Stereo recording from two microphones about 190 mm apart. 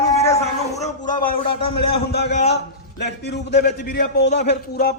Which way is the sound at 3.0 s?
65° left (ahead or behind).